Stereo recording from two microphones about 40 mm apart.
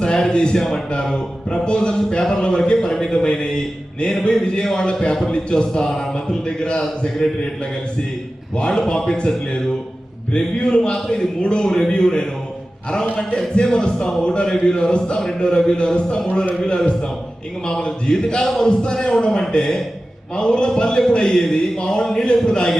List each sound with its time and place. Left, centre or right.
0.0 s speech: centre
0.5 s a man's voice: centre
0.9 s a man's voice: left
2.7 s a man's voice: centre
8.6 s a man's voice: centre
10.3 s a man's voice: left